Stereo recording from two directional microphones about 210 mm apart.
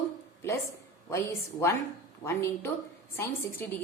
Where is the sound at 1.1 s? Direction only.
10° left (ahead or behind).